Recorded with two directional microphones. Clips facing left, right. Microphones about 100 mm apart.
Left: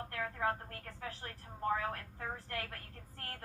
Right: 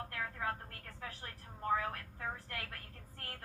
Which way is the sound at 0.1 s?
30° left (ahead or behind).